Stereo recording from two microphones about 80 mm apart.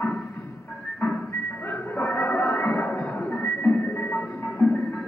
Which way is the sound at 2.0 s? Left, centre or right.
Left.